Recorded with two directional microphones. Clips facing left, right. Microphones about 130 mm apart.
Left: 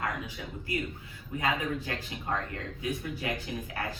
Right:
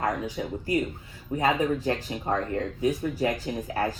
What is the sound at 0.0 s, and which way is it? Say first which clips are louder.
Speech: right 7 dB; 40° right (ahead or behind).